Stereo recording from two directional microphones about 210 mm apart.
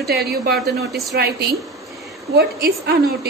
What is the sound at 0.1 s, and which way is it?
A woman's voice, 45° right (ahead or behind).